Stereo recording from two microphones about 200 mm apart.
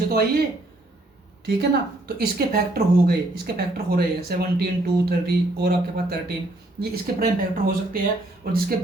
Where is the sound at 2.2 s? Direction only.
50° right (ahead or behind).